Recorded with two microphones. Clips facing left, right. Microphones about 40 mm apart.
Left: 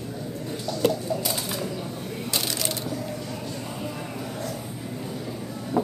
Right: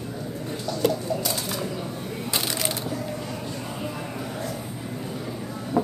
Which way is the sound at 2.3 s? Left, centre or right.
Centre.